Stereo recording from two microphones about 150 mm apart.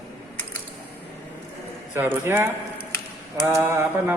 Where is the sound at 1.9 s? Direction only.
15° right (ahead or behind).